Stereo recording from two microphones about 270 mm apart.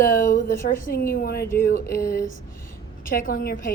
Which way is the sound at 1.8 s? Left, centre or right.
Centre.